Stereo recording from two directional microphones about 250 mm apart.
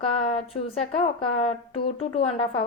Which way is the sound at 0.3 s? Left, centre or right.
Left.